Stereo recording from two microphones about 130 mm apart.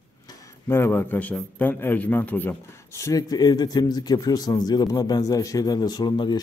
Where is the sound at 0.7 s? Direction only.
20° left (ahead or behind).